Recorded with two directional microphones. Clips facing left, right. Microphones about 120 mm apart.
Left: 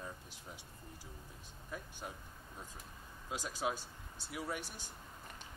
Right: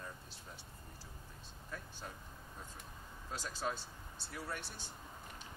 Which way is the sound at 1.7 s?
15° left (ahead or behind).